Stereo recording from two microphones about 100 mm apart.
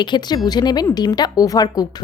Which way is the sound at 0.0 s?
45° left (ahead or behind).